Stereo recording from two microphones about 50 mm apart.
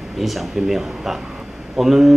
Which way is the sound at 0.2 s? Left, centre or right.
Centre.